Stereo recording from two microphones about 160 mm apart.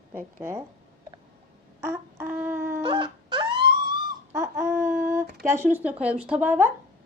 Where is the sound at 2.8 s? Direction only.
30° right (ahead or behind).